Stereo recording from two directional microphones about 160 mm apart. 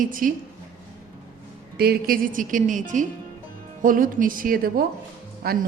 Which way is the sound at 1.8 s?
70° right (ahead or behind).